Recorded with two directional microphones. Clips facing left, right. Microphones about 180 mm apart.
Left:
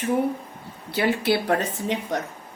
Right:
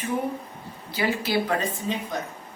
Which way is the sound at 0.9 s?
70° left (ahead or behind).